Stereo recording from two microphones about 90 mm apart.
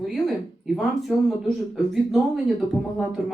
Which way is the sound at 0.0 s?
Centre (ahead or behind).